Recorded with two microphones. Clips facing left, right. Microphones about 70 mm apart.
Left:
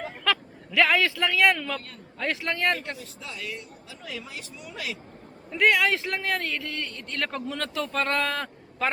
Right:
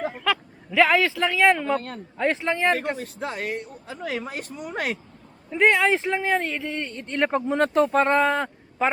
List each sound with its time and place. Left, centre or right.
0.0 s a sound: centre
2.3 s speech: centre
3.0 s speech: right
5.5 s speech: centre